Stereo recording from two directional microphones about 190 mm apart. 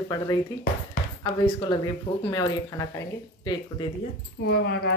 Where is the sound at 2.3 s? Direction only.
20° left (ahead or behind).